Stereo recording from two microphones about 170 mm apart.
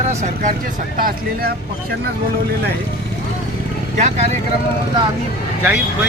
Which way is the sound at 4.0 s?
45° right (ahead or behind).